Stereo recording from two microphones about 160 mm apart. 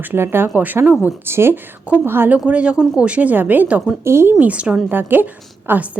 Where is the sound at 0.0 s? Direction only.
15° right (ahead or behind).